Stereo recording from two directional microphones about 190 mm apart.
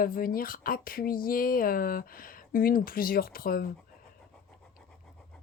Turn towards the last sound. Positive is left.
turn(degrees=50)  # may be behind; listen again after turning